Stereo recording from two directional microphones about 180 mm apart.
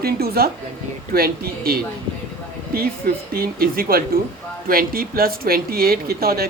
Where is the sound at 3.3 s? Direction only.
55° right (ahead or behind).